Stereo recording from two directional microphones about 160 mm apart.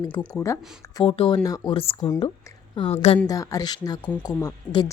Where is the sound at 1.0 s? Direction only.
40° left (ahead or behind).